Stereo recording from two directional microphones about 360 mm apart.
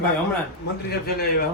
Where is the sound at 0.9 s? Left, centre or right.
Left.